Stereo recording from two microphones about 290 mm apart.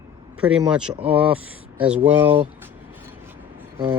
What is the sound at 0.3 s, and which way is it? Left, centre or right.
Speech, centre.